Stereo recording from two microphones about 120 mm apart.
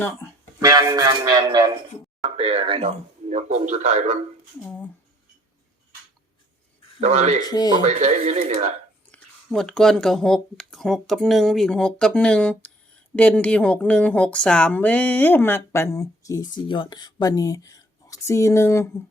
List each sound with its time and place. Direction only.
0.6 s music: 30° right (ahead or behind)
2.2 s speech: 60° right (ahead or behind)
3.2 s speech: 85° right
4.6 s speech: 10° left (ahead or behind)
7.0 s speech: 70° right (ahead or behind)
7.4 s speech: 35° left (ahead or behind)
7.9 s speech: 70° right (ahead or behind)
9.1 s speech: 5° left (ahead or behind); by 18.9 s 20° left (ahead or behind)